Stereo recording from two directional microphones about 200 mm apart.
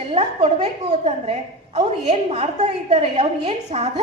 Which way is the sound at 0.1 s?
30° right (ahead or behind).